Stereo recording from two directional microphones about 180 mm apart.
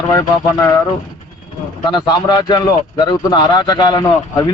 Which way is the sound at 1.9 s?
25° left (ahead or behind).